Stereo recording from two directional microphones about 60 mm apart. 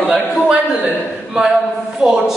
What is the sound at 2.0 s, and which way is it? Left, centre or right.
Speech, centre.